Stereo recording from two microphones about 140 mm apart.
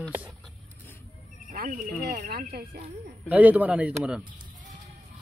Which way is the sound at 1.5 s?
80° right.